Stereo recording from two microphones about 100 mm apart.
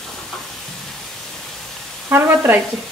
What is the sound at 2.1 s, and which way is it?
Sizzle, 25° right (ahead or behind).